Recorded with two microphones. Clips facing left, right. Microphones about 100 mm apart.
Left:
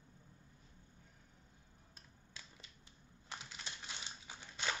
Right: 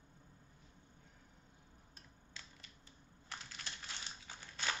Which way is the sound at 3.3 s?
15° left (ahead or behind).